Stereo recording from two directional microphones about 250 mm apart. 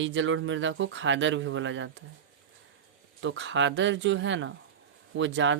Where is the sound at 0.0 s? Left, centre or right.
Right.